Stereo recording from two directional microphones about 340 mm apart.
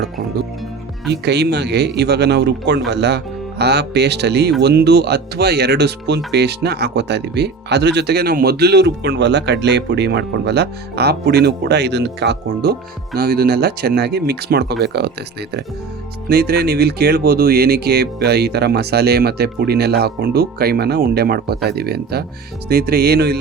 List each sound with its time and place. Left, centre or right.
1.1 s speech: right
16.3 s speech: right